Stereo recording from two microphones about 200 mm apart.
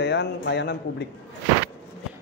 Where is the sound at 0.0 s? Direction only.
60° left (ahead or behind).